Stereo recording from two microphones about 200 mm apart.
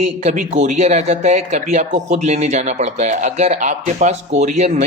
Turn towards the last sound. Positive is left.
turn(degrees=-35)  # may be behind; listen again after turning